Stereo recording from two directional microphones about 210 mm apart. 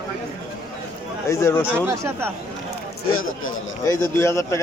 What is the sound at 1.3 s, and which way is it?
Speech, 10° left (ahead or behind).